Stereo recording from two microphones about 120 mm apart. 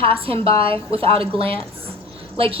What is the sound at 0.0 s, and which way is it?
Speech, 50° right (ahead or behind).